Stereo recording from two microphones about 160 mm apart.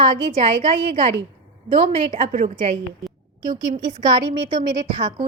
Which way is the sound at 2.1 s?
50° right (ahead or behind).